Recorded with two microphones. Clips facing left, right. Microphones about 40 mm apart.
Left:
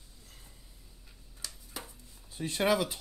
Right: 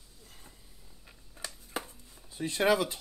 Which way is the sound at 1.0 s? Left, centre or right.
Right.